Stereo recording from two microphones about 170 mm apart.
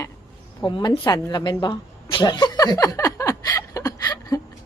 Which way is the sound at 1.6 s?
25° left (ahead or behind).